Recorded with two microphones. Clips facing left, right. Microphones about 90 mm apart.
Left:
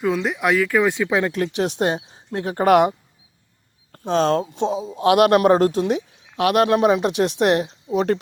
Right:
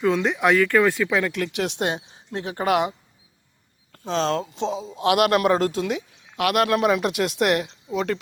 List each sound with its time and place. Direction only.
0.0 s speech: 5° left (ahead or behind)
0.9 s speech: 20° left (ahead or behind)
1.3 s speech: 35° left (ahead or behind)
3.9 s speech: 40° left (ahead or behind)
4.9 s speech: 30° left (ahead or behind)